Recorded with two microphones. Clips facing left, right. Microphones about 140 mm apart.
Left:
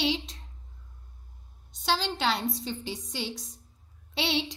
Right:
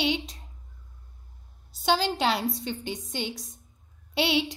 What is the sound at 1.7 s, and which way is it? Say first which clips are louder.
A woman's voice: right 4 dB; 5° right (ahead or behind).